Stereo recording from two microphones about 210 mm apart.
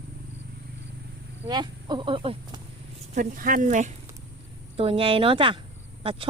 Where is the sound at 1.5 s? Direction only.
20° right (ahead or behind).